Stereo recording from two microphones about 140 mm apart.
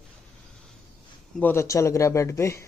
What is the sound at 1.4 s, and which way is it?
Speech, 15° left (ahead or behind).